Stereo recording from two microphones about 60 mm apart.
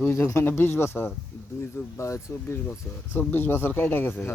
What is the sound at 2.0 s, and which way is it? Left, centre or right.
Speech, left.